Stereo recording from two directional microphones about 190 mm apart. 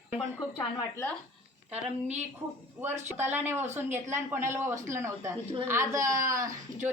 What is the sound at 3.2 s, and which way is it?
Speech, 10° right (ahead or behind).